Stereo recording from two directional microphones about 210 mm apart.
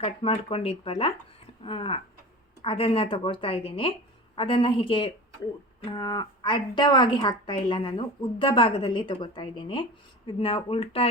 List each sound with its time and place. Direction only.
0.0 s speech: 25° left (ahead or behind)